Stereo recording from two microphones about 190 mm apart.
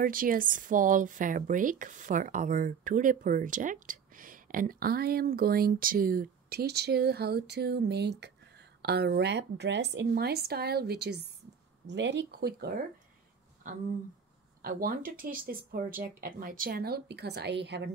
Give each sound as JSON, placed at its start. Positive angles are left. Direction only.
{"t": 0.0, "sound": "speech", "side_deg": -45}
{"t": 14.6, "sound": "speech", "side_deg": -50}